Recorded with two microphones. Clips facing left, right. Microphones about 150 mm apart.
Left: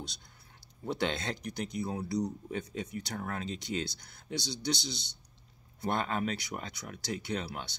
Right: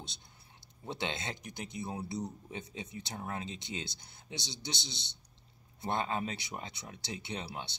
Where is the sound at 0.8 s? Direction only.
20° right (ahead or behind).